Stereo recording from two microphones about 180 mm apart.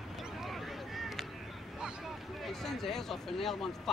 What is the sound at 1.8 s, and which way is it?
Speech, centre (ahead or behind).